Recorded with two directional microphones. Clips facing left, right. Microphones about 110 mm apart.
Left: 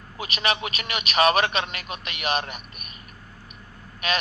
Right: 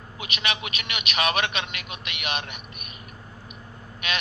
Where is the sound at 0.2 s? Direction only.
35° left (ahead or behind).